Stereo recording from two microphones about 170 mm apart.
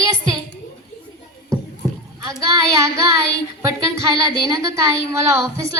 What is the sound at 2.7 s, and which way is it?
Speech, 20° right (ahead or behind).